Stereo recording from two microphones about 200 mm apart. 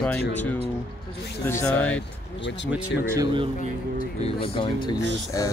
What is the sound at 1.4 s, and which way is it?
Speech, 15° left (ahead or behind).